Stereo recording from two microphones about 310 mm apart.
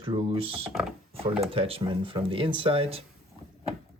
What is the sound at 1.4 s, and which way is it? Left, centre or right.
Speech, centre.